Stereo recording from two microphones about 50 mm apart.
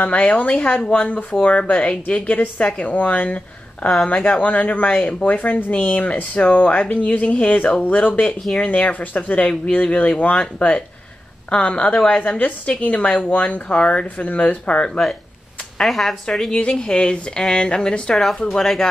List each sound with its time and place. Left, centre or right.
0.0 s a woman's voice: left
5.3 s a woman's voice: left
15.8 s speech: centre
16.5 s speech: centre
18.1 s speech: centre